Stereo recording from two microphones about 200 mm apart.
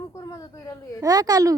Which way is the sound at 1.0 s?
20° right (ahead or behind).